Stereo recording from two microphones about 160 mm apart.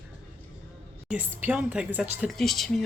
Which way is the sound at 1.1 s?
10° right (ahead or behind).